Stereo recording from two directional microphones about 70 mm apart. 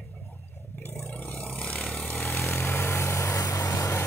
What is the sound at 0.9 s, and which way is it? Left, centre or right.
Vehicle, left.